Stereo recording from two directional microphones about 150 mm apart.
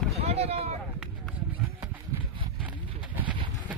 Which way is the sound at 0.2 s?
45° right (ahead or behind).